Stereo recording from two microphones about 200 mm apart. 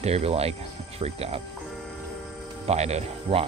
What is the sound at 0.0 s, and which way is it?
Speech, 30° right (ahead or behind).